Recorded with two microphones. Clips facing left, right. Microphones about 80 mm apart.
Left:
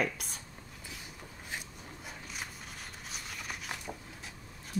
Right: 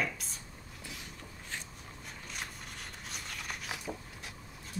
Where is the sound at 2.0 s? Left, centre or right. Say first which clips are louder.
Even; centre.